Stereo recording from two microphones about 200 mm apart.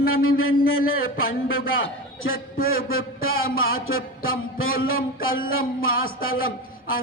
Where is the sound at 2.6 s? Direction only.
50° left (ahead or behind).